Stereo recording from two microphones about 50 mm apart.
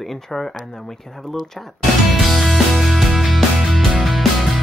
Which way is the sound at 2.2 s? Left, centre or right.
Centre.